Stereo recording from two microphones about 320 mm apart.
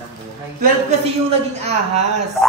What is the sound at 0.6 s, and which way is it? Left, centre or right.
A man's voice, right.